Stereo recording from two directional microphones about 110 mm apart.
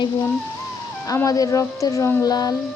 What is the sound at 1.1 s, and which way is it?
Speech, 30° left (ahead or behind).